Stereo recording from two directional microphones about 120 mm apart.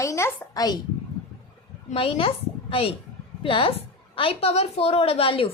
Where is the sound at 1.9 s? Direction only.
50° left (ahead or behind).